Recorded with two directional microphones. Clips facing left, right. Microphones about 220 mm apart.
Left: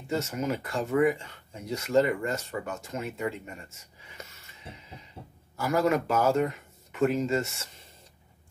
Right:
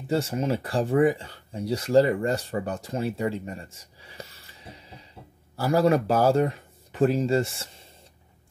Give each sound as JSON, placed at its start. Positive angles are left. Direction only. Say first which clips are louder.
{"t": 0.1, "sound": "speech", "louder": "right 4 dB", "side_deg": -30}